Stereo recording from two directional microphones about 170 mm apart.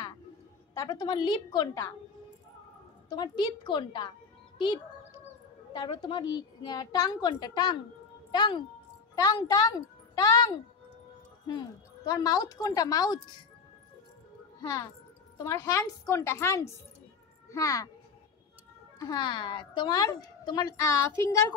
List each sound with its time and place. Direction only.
0.7 s a woman's voice: 25° left (ahead or behind)
3.1 s a woman's voice: 25° left (ahead or behind)
5.7 s a woman's voice: 30° left (ahead or behind)
15.3 s a woman's voice: 15° left (ahead or behind)
18.9 s a woman's voice: 25° left (ahead or behind)